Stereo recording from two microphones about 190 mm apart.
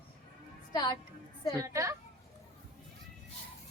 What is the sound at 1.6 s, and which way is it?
Speech, 15° right (ahead or behind).